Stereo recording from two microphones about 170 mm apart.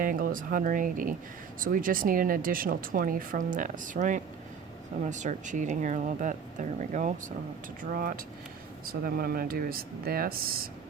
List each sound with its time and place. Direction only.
0.0 s speech: 55° right (ahead or behind)
7.8 s speech: 55° right (ahead or behind)